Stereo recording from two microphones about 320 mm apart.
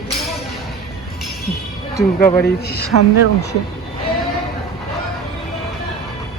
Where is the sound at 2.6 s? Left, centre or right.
Left.